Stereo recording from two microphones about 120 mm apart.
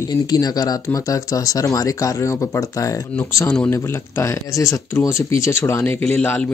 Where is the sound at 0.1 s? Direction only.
30° left (ahead or behind).